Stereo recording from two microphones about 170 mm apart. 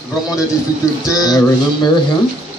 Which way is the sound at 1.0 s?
20° left (ahead or behind).